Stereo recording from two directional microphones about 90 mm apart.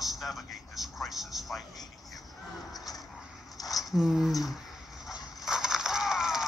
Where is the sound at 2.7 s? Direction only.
45° left (ahead or behind).